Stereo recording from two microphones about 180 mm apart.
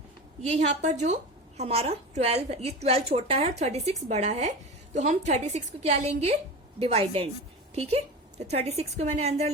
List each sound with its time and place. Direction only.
0.4 s a woman's voice: 40° right (ahead or behind)